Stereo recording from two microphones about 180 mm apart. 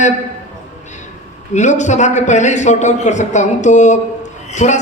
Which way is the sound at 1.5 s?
40° left (ahead or behind).